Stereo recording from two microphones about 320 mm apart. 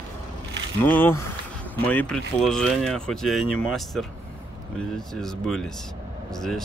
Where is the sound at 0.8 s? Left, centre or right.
Centre.